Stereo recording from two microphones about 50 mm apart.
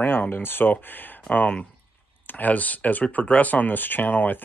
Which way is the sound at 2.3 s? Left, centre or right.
Left.